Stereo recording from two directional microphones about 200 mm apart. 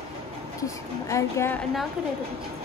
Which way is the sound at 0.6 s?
15° left (ahead or behind).